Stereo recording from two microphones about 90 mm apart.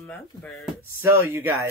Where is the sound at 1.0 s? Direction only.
25° right (ahead or behind).